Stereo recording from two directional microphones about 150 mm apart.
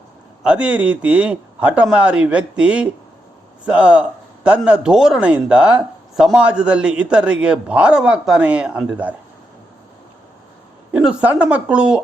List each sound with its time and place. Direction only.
0.4 s speech: 10° right (ahead or behind)
10.9 s speech: 10° right (ahead or behind)